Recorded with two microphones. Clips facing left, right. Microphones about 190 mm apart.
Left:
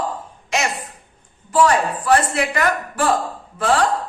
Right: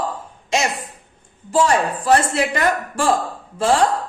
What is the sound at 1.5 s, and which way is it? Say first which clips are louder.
A man's voice: left 1 dB; 25° right (ahead or behind).